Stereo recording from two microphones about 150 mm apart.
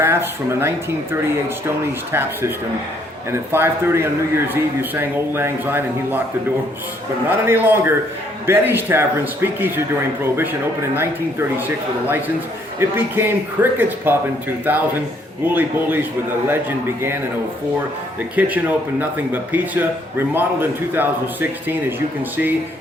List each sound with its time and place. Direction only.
0.0 s speech: 15° right (ahead or behind)
3.3 s a man's voice: 15° right (ahead or behind)
7.3 s a man's voice: 15° right (ahead or behind)
10.9 s a man's voice: 15° right (ahead or behind)
12.8 s a man's voice: 15° right (ahead or behind)
18.3 s a man's voice: 10° right (ahead or behind)